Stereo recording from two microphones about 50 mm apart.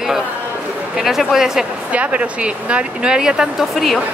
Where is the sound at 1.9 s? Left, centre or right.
Right.